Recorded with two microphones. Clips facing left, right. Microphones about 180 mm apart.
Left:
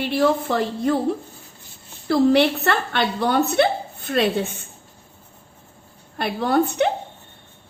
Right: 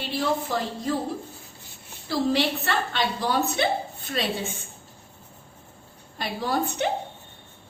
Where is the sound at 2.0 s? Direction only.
60° left (ahead or behind).